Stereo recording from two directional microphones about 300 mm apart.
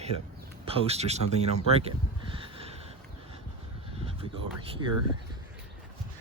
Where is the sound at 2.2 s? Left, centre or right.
Centre.